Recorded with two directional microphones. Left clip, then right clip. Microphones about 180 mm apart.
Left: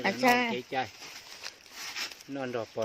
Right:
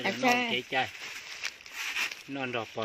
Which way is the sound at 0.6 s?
30° right (ahead or behind).